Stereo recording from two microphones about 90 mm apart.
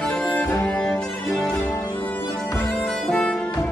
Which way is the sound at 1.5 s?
30° left (ahead or behind).